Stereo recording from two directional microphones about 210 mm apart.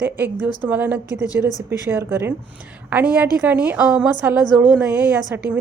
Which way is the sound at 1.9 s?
10° right (ahead or behind).